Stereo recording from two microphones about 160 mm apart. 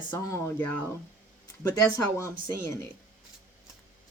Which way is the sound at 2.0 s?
20° left (ahead or behind).